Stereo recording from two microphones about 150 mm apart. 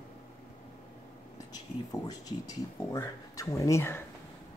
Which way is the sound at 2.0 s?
25° left (ahead or behind).